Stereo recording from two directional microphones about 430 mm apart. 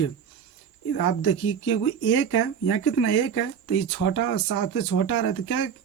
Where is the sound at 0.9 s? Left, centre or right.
Left.